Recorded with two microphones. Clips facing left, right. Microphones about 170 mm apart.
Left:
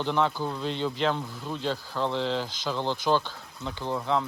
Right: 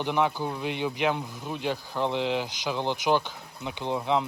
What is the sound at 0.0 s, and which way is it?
Speech, 15° right (ahead or behind).